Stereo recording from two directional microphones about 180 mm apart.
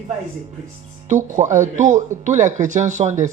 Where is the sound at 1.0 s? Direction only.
45° right (ahead or behind).